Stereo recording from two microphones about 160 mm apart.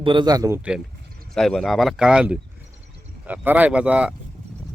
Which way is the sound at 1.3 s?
5° left (ahead or behind).